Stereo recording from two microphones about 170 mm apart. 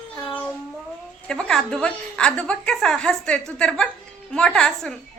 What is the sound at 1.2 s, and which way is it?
A woman's voice, 5° left (ahead or behind).